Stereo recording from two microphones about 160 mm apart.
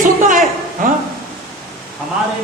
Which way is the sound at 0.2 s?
55° right (ahead or behind).